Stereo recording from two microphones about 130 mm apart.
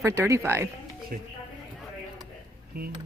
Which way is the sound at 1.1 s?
90° right.